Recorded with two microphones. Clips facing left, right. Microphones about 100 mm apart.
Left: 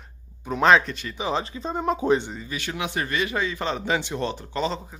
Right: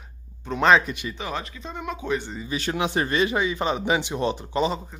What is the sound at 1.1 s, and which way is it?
Speech, 20° left (ahead or behind).